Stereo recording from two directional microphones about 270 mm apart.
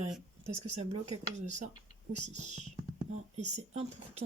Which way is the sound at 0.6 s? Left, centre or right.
Right.